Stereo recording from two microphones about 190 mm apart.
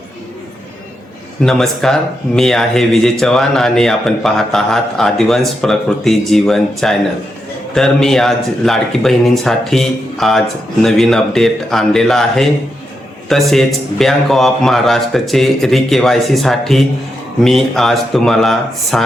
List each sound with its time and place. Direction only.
1.4 s speech: centre (ahead or behind)